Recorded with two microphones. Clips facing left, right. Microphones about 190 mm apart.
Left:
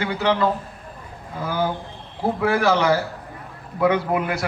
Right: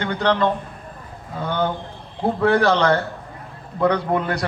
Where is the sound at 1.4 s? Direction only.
5° left (ahead or behind).